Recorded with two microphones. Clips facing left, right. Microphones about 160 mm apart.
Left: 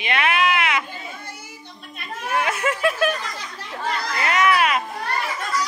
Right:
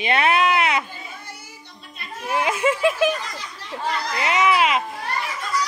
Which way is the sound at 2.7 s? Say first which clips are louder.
Right 3 dB; 20° right (ahead or behind).